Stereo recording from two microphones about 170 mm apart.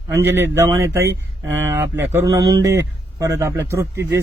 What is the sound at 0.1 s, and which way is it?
A man's voice, 15° right (ahead or behind).